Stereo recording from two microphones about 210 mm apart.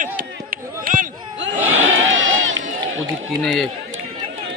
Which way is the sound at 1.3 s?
60° right (ahead or behind).